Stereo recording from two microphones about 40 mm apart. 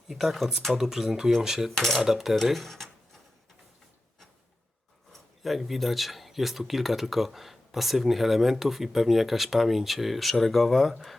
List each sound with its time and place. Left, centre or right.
0.1 s speech: centre
1.7 s speech: centre
2.0 s speech: centre
2.3 s speech: centre
5.1 s speech: centre